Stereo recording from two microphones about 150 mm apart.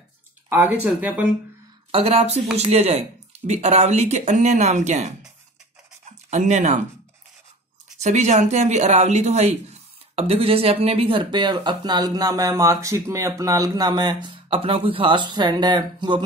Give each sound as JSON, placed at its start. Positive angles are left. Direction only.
{"t": 0.5, "sound": "speech", "side_deg": -10}
{"t": 1.9, "sound": "speech", "side_deg": -40}
{"t": 6.3, "sound": "speech", "side_deg": -50}
{"t": 8.0, "sound": "speech", "side_deg": -50}